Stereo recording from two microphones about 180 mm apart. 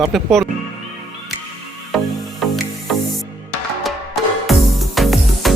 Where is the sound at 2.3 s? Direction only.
Centre (ahead or behind).